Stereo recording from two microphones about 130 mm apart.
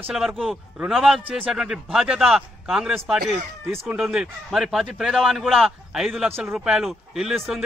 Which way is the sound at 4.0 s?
5° right (ahead or behind).